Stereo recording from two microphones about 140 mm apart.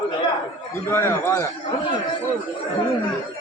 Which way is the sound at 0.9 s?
15° left (ahead or behind).